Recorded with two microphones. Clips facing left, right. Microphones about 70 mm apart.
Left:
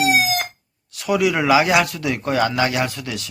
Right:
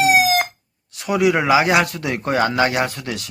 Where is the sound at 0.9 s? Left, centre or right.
Right.